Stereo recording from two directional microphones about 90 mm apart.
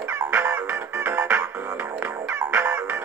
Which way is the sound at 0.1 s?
25° right (ahead or behind).